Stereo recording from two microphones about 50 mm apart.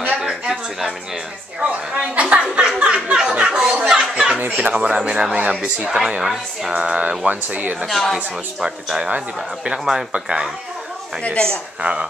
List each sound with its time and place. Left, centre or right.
0.2 s a sound: centre
2.1 s a sound: right
4.4 s speech: right
5.8 s speech: centre
6.7 s speech: right
7.8 s a woman's voice: centre
8.6 s speech: centre
11.2 s speech: left
11.8 s speech: centre